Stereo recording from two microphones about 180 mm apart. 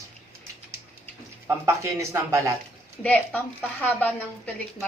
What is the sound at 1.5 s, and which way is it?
Speech, 15° right (ahead or behind).